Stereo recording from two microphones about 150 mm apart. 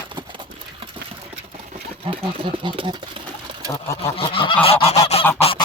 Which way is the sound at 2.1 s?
35° right (ahead or behind).